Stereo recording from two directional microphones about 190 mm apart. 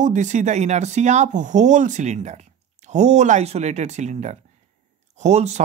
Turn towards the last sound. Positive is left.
turn(degrees=-35)  # may be behind; listen again after turning